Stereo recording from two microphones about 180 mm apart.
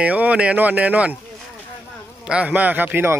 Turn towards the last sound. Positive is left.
turn(degrees=-10)  # may be behind; listen again after turning